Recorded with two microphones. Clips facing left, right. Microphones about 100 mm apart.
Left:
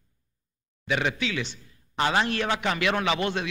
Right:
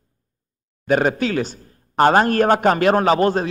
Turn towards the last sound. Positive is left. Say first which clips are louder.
# right 10 dB
turn(degrees=-40)  # may be behind; listen again after turning